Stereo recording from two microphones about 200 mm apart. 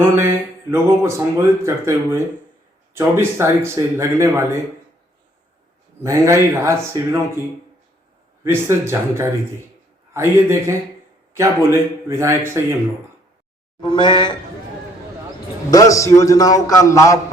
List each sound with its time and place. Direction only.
0.2 s speech: 15° right (ahead or behind)
6.0 s speech: 15° right (ahead or behind)
8.4 s speech: 15° right (ahead or behind)
13.8 s speech: 25° left (ahead or behind)
15.7 s a man's voice: 15° left (ahead or behind)